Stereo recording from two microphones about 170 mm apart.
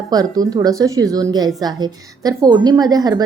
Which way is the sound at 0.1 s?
20° right (ahead or behind).